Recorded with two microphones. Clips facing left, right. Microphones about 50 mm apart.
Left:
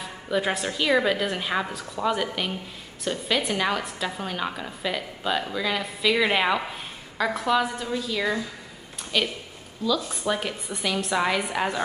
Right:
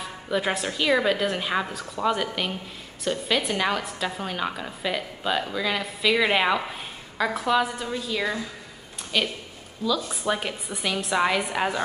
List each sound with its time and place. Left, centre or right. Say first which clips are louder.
0.0 s a woman's voice: even; centre